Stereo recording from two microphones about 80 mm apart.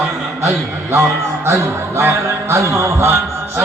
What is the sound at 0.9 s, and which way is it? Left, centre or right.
Speech, right.